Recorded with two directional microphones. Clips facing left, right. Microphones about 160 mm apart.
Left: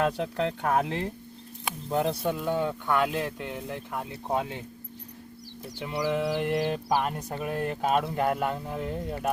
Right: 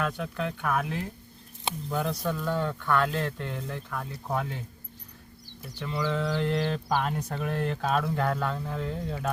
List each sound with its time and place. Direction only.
0.0 s speech: 30° left (ahead or behind)
5.8 s speech: 15° left (ahead or behind)